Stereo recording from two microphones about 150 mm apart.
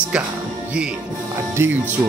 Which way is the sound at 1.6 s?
15° right (ahead or behind).